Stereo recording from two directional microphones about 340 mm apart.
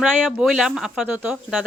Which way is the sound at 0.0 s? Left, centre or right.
Centre.